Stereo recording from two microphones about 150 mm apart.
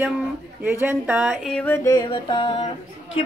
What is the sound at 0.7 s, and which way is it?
Speech, 10° right (ahead or behind).